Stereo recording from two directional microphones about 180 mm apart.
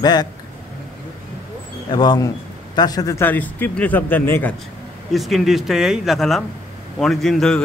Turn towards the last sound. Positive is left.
turn(degrees=0)  # may be behind; listen again after turning